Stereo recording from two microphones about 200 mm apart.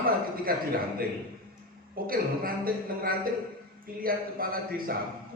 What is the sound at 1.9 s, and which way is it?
A man's voice, 45° right (ahead or behind).